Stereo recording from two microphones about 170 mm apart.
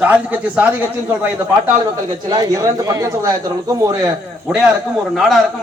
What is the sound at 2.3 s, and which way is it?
Speech, 20° right (ahead or behind).